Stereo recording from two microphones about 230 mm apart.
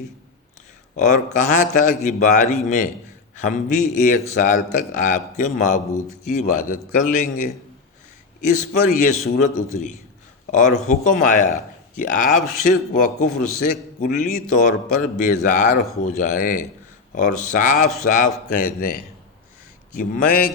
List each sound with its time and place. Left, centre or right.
0.9 s a man's voice: left
10.5 s a man's voice: left
20.0 s a man's voice: left